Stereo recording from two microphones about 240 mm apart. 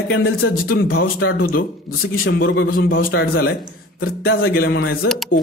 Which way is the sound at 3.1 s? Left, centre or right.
Left.